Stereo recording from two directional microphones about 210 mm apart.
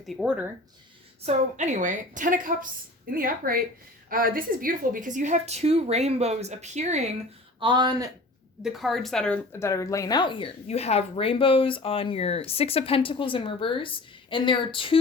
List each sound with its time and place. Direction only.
0.0 s speech: centre (ahead or behind)
1.2 s a woman's voice: 30° right (ahead or behind)
7.6 s speech: 20° right (ahead or behind)
8.6 s speech: centre (ahead or behind); by 14.9 s 25° left (ahead or behind)